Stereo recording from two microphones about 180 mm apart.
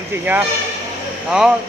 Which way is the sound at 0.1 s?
10° right (ahead or behind).